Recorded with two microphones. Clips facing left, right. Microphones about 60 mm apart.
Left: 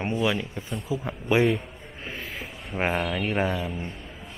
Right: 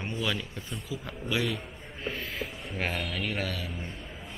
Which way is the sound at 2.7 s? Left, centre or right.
Left.